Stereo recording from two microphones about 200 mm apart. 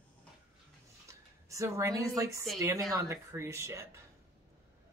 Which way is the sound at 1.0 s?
15° right (ahead or behind).